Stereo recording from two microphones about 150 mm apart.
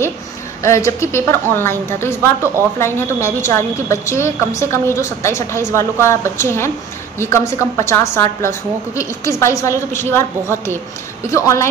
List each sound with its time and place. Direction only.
0.6 s a woman's voice: 20° left (ahead or behind)